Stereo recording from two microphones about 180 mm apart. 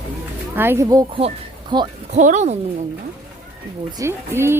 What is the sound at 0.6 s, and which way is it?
Speech, 15° right (ahead or behind).